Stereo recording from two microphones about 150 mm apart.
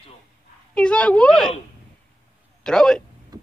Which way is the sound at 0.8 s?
5° left (ahead or behind).